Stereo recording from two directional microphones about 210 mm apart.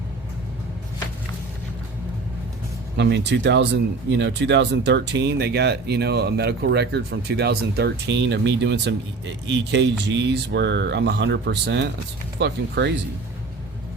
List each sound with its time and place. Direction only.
3.0 s speech: 55° right (ahead or behind)